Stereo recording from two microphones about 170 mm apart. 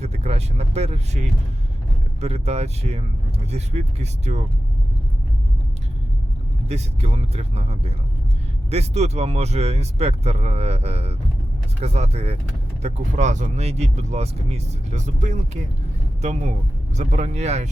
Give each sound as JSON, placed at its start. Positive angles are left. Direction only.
{"t": 0.0, "sound": "speech", "side_deg": -40}
{"t": 2.2, "sound": "speech", "side_deg": -40}
{"t": 6.7, "sound": "speech", "side_deg": -35}